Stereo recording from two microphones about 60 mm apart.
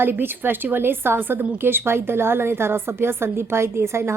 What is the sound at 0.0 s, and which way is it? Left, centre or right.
A woman's voice, right.